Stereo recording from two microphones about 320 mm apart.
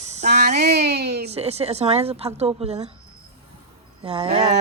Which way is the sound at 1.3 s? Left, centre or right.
Centre.